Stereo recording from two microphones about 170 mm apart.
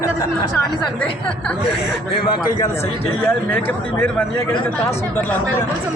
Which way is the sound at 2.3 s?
25° left (ahead or behind).